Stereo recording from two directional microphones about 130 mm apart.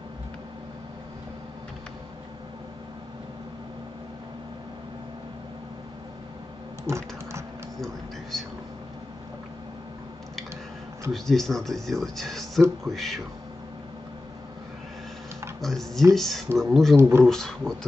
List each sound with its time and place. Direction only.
6.8 s typing: 20° right (ahead or behind)
7.8 s speech: centre (ahead or behind)
11.1 s speech: 5° left (ahead or behind)
15.6 s speech: centre (ahead or behind)